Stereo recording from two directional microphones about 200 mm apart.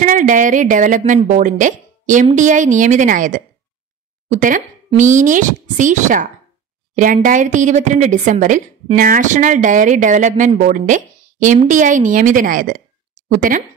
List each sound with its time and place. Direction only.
0.0 s speech: 40° right (ahead or behind)